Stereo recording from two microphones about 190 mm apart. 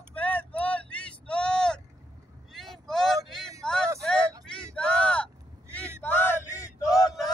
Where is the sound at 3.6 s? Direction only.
5° left (ahead or behind).